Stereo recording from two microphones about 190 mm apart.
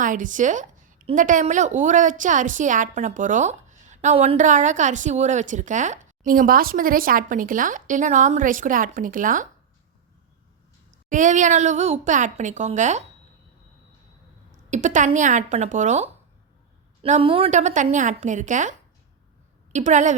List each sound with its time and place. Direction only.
0.0 s a woman's voice: 45° right (ahead or behind)
11.1 s a woman's voice: 40° right (ahead or behind)
14.7 s a woman's voice: 40° right (ahead or behind)